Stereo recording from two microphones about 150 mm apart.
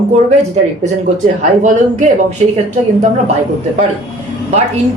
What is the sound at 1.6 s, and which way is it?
Speech, 55° right (ahead or behind).